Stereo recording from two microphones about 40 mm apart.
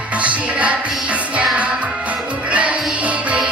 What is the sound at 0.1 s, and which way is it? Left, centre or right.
Music, right.